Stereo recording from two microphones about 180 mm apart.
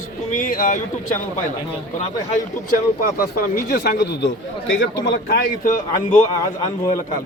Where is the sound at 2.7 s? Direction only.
55° left (ahead or behind).